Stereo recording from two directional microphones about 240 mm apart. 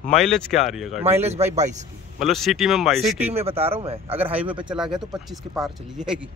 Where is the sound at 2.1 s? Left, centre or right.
Centre.